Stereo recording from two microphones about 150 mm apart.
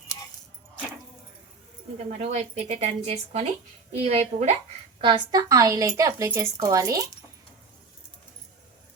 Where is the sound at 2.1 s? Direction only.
50° right (ahead or behind).